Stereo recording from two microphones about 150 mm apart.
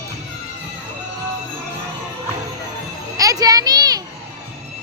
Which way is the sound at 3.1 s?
25° right (ahead or behind).